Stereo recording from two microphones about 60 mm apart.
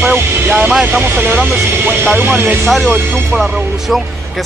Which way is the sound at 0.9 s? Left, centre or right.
Right.